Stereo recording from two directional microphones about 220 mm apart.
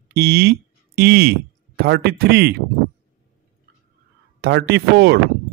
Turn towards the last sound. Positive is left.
turn(degrees=-45)  # may be behind; listen again after turning